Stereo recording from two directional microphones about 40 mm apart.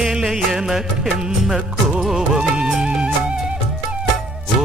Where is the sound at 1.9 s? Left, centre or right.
Centre.